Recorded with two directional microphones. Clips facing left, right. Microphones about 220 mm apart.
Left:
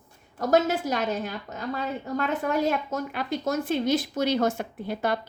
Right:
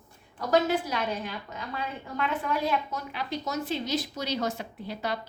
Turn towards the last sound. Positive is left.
turn(degrees=50)  # may be behind; listen again after turning